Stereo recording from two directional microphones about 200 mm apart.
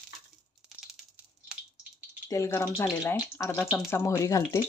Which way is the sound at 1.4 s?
10° right (ahead or behind).